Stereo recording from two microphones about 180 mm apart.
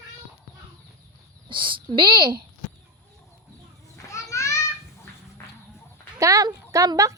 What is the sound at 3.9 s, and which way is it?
Children playing, 15° left (ahead or behind).